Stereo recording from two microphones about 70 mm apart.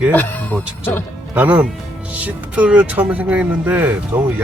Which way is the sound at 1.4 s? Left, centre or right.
Right.